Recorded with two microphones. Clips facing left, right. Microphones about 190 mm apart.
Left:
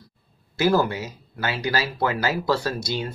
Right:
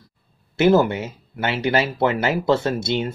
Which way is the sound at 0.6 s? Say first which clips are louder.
Right 5 dB; 25° right (ahead or behind).